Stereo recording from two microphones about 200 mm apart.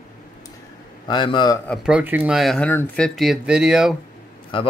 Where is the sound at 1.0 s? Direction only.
20° left (ahead or behind).